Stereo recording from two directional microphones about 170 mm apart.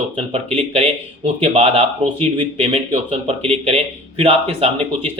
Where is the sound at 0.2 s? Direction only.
35° right (ahead or behind).